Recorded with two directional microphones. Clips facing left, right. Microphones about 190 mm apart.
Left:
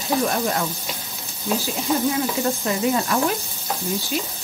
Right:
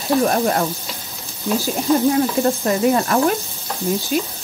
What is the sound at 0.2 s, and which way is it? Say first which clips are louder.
Frying: right 5 dB; 50° right (ahead or behind).